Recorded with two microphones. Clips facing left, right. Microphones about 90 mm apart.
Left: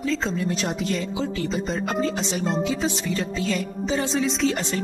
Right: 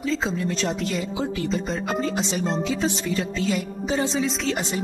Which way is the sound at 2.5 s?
15° left (ahead or behind).